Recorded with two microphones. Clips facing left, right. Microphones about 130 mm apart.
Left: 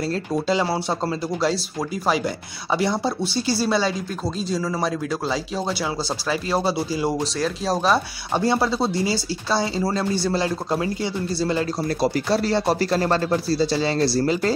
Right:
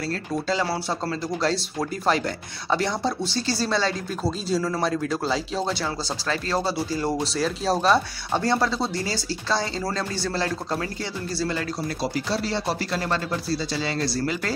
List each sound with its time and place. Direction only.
0.0 s speech: 20° left (ahead or behind)
1.4 s speech: 5° left (ahead or behind)
4.2 s speech: 5° right (ahead or behind)
7.2 s speech: centre (ahead or behind)
8.3 s speech: 15° left (ahead or behind)
12.0 s speech: 45° left (ahead or behind); by 14.5 s 30° left (ahead or behind)